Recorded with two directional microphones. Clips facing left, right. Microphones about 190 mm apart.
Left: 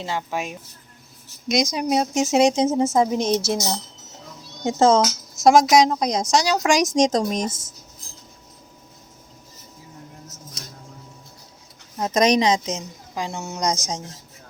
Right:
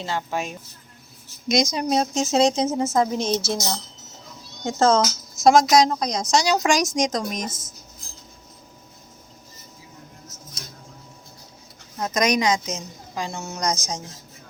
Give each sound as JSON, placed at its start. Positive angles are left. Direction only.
{"t": 0.0, "sound": "speech", "side_deg": 10}
{"t": 6.3, "sound": "speech", "side_deg": 0}
{"t": 6.9, "sound": "speech", "side_deg": 30}
{"t": 11.9, "sound": "a woman's voice", "side_deg": 25}